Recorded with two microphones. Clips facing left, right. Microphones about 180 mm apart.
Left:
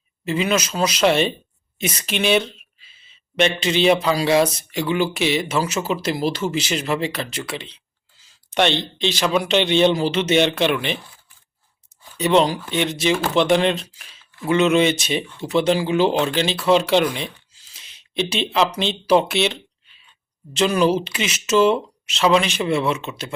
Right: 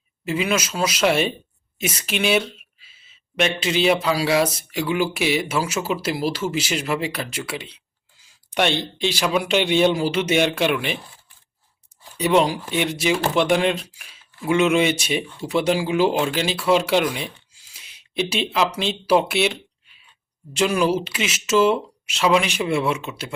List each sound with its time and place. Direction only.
0.3 s speech: 5° right (ahead or behind)
12.1 s speech: 10° right (ahead or behind)